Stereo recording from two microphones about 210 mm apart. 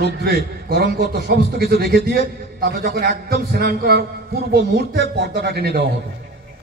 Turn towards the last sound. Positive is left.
turn(degrees=-50)  # may be behind; listen again after turning